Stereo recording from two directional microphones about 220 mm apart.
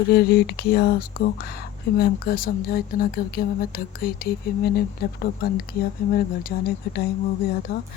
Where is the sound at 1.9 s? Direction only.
45° left (ahead or behind).